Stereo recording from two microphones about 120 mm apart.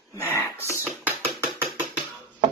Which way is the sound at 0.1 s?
20° left (ahead or behind).